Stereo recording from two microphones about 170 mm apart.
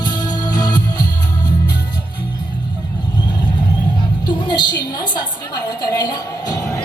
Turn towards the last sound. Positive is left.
turn(degrees=20)  # may be behind; listen again after turning